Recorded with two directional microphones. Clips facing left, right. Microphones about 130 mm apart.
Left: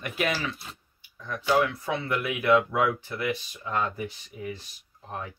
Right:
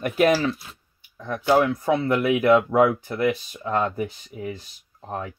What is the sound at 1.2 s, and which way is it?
Speech, 50° right (ahead or behind).